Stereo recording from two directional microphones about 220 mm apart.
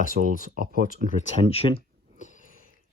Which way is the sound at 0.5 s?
40° right (ahead or behind).